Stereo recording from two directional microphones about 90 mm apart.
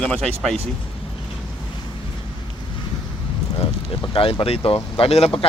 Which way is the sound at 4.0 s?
80° left.